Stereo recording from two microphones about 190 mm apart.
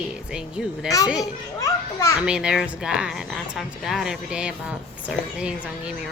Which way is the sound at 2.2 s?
5° right (ahead or behind).